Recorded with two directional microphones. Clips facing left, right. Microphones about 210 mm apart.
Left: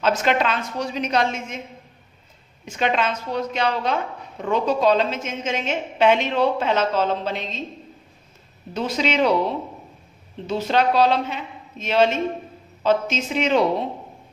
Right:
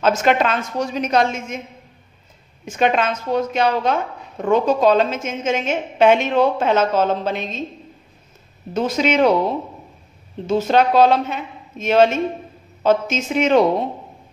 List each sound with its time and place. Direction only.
0.0 s a woman's voice: 50° right (ahead or behind)
2.6 s a woman's voice: 50° right (ahead or behind)
8.7 s a woman's voice: 50° right (ahead or behind)
10.4 s a woman's voice: 45° right (ahead or behind)